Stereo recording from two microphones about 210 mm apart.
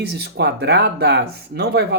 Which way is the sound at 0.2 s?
50° right (ahead or behind).